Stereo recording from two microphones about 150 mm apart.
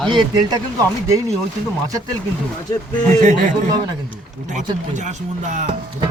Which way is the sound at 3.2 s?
60° right (ahead or behind).